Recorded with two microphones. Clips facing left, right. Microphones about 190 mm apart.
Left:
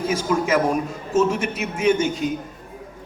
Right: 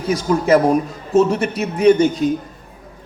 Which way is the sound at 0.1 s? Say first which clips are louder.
Right 8 dB; 35° right (ahead or behind).